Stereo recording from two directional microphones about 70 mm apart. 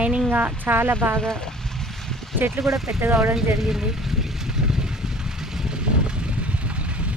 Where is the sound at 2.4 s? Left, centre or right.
Right.